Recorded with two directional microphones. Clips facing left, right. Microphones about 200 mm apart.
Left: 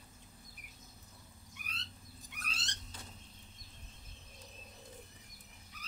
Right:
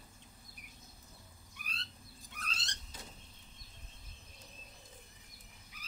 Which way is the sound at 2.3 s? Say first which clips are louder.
Right 2 dB; 10° left (ahead or behind).